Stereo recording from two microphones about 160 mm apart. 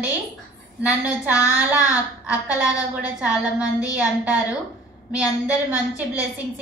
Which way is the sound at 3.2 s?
10° right (ahead or behind).